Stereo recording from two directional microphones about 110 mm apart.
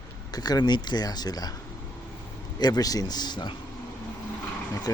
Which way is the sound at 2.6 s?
35° left (ahead or behind).